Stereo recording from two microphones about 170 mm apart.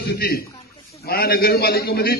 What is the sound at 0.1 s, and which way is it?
A man's voice, 65° left (ahead or behind).